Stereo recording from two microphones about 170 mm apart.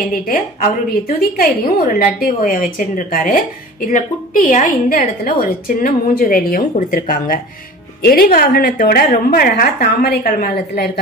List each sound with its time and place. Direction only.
0.1 s a woman's voice: 55° left (ahead or behind)